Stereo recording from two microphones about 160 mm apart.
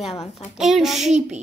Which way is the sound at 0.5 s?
Centre (ahead or behind).